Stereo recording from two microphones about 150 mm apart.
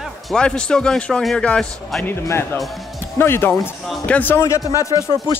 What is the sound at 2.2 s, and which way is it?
A man's voice, 20° left (ahead or behind).